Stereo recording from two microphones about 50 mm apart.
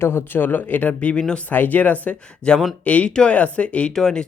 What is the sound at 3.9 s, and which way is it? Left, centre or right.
Speech, centre.